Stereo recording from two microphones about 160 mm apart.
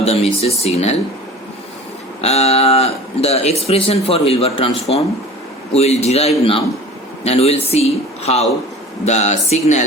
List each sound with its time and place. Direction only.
0.0 s speech: 40° left (ahead or behind)
2.2 s speech: 40° left (ahead or behind)